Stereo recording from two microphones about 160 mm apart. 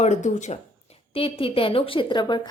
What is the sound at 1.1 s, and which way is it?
A woman's voice, 35° left (ahead or behind).